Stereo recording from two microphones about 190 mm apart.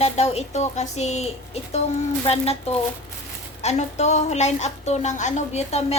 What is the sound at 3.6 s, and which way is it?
A woman's voice, 35° left (ahead or behind).